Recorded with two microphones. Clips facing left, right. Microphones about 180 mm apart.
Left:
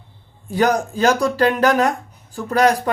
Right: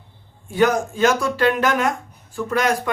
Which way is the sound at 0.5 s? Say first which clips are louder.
Even; 35° left (ahead or behind).